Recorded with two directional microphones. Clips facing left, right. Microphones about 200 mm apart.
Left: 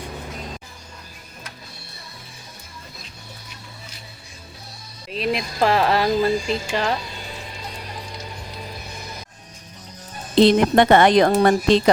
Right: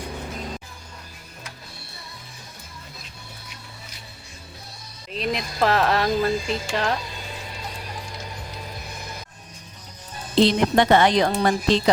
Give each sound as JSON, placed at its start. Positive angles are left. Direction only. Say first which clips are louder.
{"t": 5.1, "sound": "music", "louder": "left 3 dB", "side_deg": 0}
{"t": 5.6, "sound": "speech", "louder": "left 2 dB", "side_deg": 0}
{"t": 10.4, "sound": "a woman's voice", "louder": "left 4 dB", "side_deg": 55}